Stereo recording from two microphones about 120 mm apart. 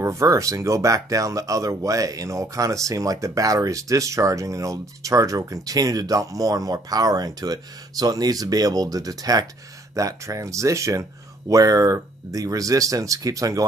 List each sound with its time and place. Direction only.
0.0 s speech: 25° right (ahead or behind)